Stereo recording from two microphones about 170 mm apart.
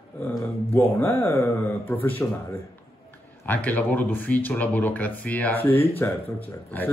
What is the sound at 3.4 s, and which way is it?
A man's voice, 10° left (ahead or behind).